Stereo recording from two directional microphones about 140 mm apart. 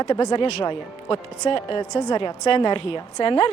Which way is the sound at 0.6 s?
40° left (ahead or behind).